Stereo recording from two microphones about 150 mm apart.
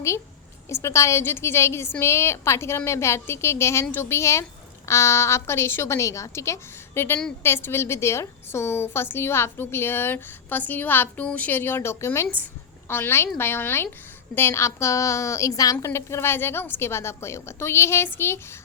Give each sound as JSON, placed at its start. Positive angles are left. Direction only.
{"t": 0.7, "sound": "a woman's voice", "side_deg": 20}